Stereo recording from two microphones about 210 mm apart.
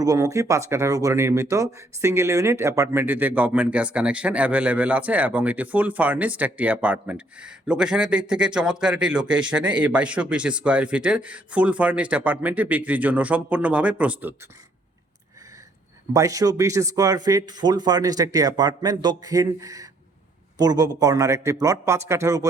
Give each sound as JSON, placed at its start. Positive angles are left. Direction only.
{"t": 0.0, "sound": "speech", "side_deg": -15}
{"t": 16.1, "sound": "speech", "side_deg": -15}